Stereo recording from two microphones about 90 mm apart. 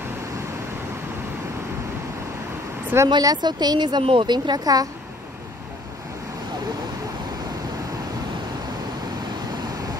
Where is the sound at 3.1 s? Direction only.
50° right (ahead or behind).